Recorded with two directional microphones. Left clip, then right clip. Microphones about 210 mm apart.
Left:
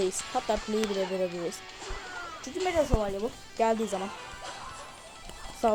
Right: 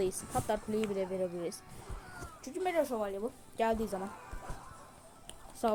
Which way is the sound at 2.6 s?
20° left (ahead or behind).